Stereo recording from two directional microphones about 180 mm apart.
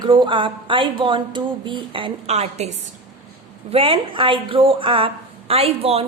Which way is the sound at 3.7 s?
30° right (ahead or behind).